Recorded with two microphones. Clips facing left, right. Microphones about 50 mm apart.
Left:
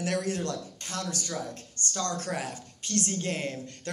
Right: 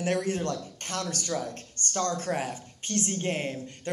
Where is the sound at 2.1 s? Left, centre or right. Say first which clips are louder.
Right 3 dB; right.